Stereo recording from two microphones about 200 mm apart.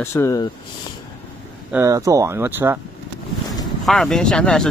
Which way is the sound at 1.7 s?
15° right (ahead or behind).